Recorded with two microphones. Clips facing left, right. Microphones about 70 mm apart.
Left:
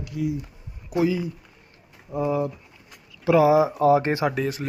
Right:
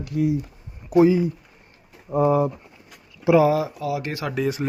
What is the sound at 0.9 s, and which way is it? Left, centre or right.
Speech, right.